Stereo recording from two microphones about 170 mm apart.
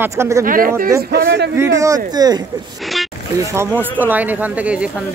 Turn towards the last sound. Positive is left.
turn(degrees=-5)  # may be behind; listen again after turning